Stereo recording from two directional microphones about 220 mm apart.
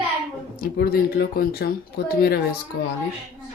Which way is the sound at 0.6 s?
45° left (ahead or behind).